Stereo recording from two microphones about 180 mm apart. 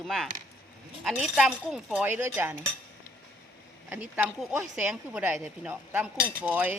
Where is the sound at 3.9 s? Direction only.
10° right (ahead or behind).